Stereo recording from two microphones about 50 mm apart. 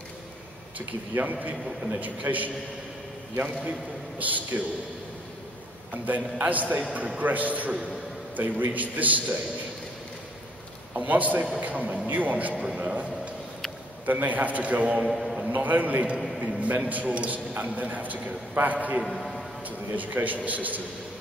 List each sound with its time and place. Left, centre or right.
0.7 s a man's voice: right
6.0 s a man's voice: right
8.7 s a man's voice: right
11.0 s a man's voice: right
12.5 s a man's voice: right
14.0 s a man's voice: right
15.0 s a man's voice: centre
15.5 s a man's voice: right
19.0 s a man's voice: centre
20.0 s a man's voice: right